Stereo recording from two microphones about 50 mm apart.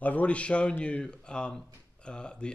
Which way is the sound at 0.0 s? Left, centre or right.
Left.